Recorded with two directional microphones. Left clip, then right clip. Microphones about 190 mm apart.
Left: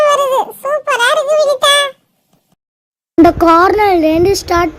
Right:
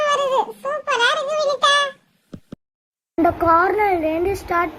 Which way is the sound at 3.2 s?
50° left (ahead or behind).